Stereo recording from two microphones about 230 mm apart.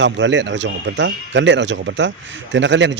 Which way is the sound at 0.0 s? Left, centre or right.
Right.